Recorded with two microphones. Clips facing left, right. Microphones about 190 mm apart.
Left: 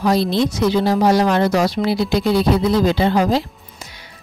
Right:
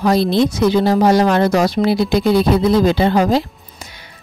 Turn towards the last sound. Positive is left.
turn(degrees=-50)  # may be behind; listen again after turning